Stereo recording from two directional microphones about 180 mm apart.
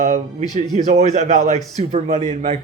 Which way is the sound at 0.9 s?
40° right (ahead or behind).